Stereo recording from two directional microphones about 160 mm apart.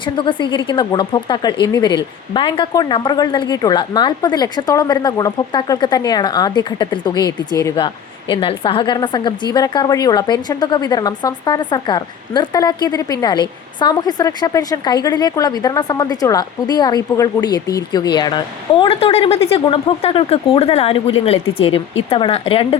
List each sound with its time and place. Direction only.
0.0 s a woman's voice: 30° left (ahead or behind)